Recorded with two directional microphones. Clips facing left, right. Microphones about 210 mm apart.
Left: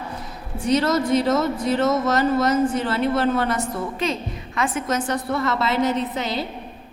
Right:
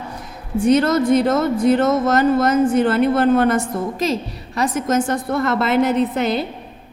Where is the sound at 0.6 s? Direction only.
55° right (ahead or behind).